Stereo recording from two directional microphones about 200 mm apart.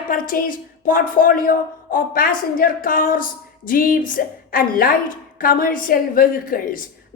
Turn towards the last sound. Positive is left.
turn(degrees=45)  # may be behind; listen again after turning